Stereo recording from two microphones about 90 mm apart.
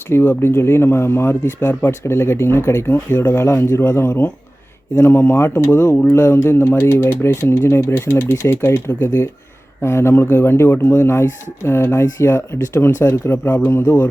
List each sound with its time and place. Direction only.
0.1 s speech: 25° left (ahead or behind)
3.2 s speech: 35° left (ahead or behind)